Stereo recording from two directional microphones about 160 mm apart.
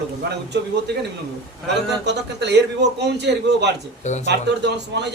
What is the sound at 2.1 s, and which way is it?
Speech, 90° right.